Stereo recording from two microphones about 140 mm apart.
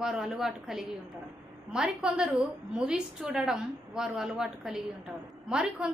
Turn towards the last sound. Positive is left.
turn(degrees=-5)  # may be behind; listen again after turning